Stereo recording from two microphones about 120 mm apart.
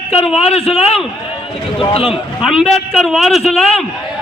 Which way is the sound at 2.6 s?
Centre (ahead or behind).